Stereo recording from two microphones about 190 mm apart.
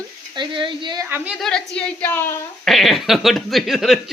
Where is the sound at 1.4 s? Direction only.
5° left (ahead or behind).